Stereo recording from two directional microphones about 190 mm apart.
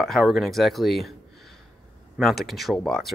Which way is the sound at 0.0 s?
Centre (ahead or behind).